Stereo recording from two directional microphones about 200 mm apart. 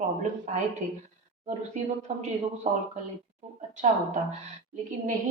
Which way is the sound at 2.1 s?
30° right (ahead or behind).